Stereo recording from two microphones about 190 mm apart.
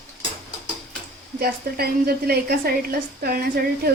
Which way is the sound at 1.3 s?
55° right (ahead or behind).